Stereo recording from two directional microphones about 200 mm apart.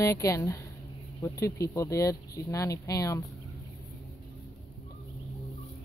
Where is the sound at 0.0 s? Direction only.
15° left (ahead or behind).